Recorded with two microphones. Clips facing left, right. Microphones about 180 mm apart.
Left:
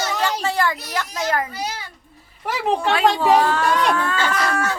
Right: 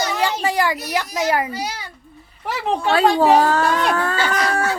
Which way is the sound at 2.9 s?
40° right (ahead or behind).